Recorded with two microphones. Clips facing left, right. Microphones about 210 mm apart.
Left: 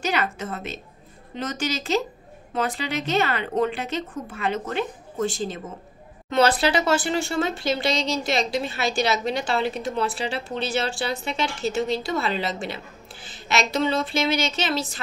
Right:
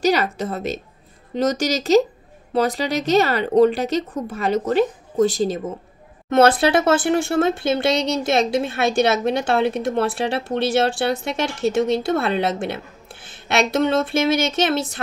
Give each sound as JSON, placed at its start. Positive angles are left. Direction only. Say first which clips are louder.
{"t": 0.0, "sound": "speech", "louder": "right 7 dB", "side_deg": -35}
{"t": 6.3, "sound": "a woman's voice", "louder": "right 5 dB", "side_deg": -50}